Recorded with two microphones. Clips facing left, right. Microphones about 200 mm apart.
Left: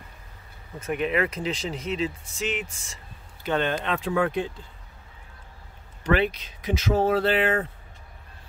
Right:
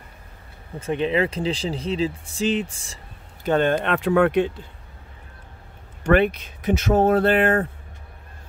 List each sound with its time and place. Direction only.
0.7 s speech: 30° right (ahead or behind)
3.4 s speech: 45° right (ahead or behind); by 4.6 s 70° right (ahead or behind)
6.0 s speech: 50° right (ahead or behind)